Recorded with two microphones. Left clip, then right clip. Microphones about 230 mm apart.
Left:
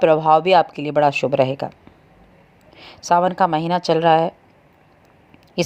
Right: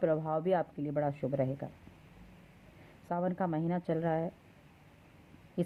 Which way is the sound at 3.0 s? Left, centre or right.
Left.